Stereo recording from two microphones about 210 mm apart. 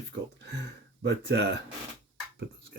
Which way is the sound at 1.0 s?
55° right (ahead or behind).